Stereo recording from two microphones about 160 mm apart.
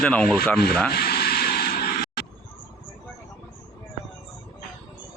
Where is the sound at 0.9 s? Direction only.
75° left (ahead or behind).